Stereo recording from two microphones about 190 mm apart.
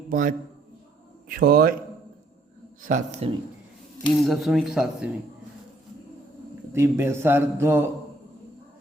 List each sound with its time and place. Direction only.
0.1 s a man's voice: 45° right (ahead or behind)
1.4 s a man's voice: 50° right (ahead or behind)
2.8 s a man's voice: 40° right (ahead or behind)
4.1 s speech: centre (ahead or behind)
6.7 s a man's voice: 15° right (ahead or behind)